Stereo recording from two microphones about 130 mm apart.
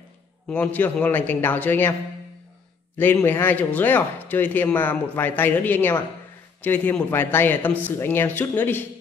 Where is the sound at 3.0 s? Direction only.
15° left (ahead or behind).